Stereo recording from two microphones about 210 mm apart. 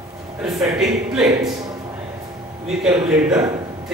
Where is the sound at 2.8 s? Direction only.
5° right (ahead or behind).